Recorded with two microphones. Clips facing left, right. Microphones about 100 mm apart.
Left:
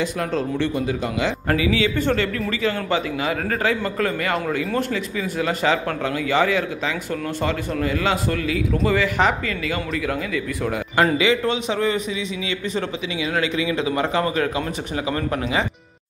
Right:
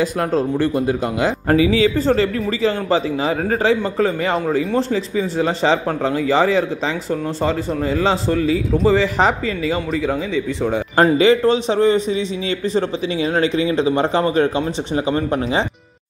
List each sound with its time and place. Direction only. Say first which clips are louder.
0.0 s a man's voice: right 5 dB; 40° right (ahead or behind)
1.5 s a man's voice: right 6 dB; 30° right (ahead or behind)
11.1 s a man's voice: right 6 dB; 35° right (ahead or behind)